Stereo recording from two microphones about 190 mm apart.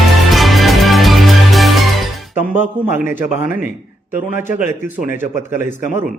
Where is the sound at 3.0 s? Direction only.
45° left (ahead or behind).